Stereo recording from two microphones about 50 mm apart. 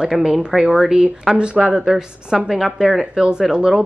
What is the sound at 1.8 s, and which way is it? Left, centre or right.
A woman's voice, centre.